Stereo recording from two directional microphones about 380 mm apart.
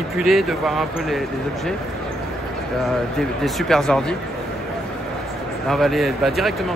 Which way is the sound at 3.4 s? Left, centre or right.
Centre.